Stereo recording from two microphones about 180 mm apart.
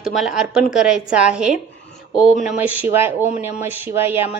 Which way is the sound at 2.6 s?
10° right (ahead or behind).